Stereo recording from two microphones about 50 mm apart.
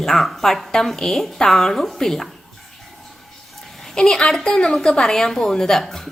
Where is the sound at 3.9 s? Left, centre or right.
Centre.